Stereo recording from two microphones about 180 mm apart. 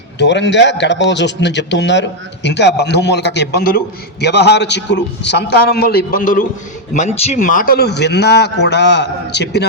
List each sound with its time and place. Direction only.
0.2 s a man's voice: 80° left; by 6.4 s 50° left (ahead or behind)
6.9 s a man's voice: 40° left (ahead or behind); by 9.6 s 70° left (ahead or behind)